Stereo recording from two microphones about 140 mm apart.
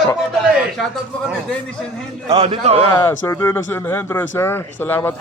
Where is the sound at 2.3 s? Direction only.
50° right (ahead or behind).